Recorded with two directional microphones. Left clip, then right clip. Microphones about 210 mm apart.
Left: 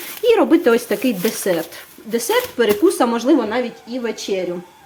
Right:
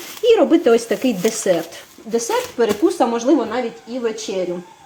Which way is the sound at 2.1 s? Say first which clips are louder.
Left 1 dB; 15° left (ahead or behind).